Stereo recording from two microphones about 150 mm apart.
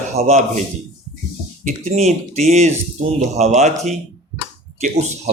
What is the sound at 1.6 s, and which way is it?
A man's voice, 45° right (ahead or behind).